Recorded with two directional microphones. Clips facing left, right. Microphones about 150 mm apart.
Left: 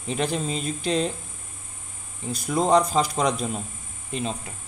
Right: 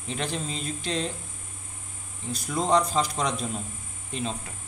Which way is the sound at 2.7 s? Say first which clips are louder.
Left 2 dB; 10° left (ahead or behind).